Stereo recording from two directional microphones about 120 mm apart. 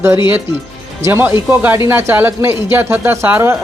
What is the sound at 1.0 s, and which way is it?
A man's voice, 20° right (ahead or behind).